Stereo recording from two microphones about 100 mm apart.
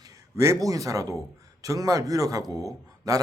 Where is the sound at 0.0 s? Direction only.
30° right (ahead or behind).